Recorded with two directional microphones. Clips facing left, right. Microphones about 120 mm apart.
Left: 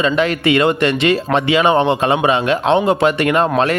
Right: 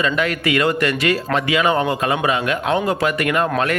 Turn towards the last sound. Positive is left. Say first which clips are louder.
# left 5 dB
turn(degrees=30)  # may be behind; listen again after turning